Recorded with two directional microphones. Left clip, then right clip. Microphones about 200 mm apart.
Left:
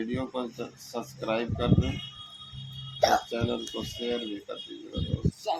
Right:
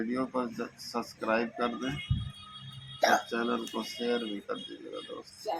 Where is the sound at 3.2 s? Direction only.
10° left (ahead or behind).